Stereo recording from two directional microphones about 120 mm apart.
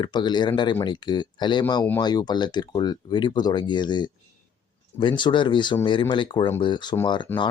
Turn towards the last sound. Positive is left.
turn(degrees=20)  # may be behind; listen again after turning